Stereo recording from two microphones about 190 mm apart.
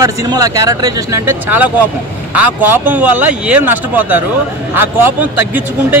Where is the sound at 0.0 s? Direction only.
20° right (ahead or behind).